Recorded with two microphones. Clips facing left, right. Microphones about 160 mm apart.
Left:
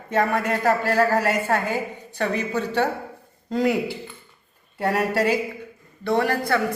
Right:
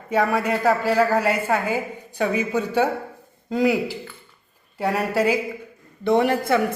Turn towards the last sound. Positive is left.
turn(degrees=-20)  # may be behind; listen again after turning